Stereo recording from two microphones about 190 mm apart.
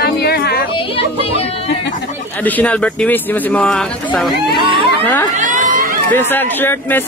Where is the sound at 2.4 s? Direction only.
10° left (ahead or behind).